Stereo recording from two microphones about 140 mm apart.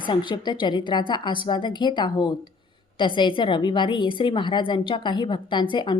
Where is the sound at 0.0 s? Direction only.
35° left (ahead or behind).